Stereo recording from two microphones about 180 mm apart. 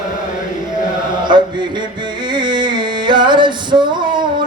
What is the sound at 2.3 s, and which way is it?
Music, 25° right (ahead or behind).